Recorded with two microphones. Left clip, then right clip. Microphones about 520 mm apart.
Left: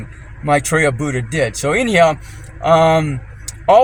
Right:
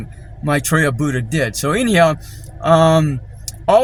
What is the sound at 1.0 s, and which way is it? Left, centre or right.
Speech, right.